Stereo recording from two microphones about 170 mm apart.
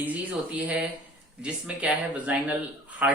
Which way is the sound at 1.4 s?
5° right (ahead or behind).